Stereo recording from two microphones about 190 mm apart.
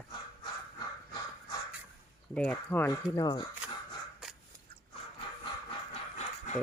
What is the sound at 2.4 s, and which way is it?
Speech, 10° left (ahead or behind).